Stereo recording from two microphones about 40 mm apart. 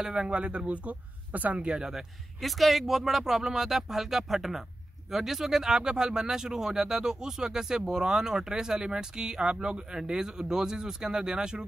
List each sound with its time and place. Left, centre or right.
0.0 s speech: centre
0.3 s speech: right
1.8 s speech: centre